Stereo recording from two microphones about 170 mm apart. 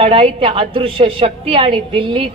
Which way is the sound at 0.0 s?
35° right (ahead or behind).